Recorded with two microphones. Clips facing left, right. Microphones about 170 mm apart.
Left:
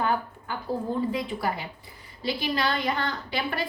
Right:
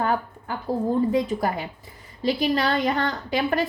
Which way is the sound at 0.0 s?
40° right (ahead or behind).